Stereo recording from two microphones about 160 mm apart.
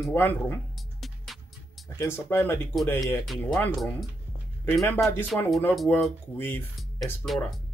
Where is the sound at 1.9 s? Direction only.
15° left (ahead or behind).